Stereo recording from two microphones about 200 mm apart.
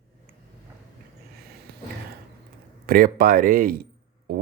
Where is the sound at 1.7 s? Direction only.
50° right (ahead or behind).